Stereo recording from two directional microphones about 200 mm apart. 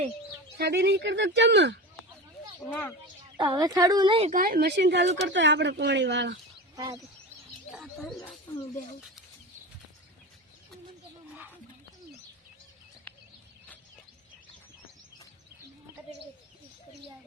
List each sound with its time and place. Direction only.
0.6 s speech: 55° right (ahead or behind)
2.6 s speech: 5° left (ahead or behind)
3.3 s speech: 20° right (ahead or behind)
4.3 s speech: 45° right (ahead or behind); by 6.4 s 60° right (ahead or behind)
6.7 s speech: 20° right (ahead or behind)
7.7 s speech: centre (ahead or behind)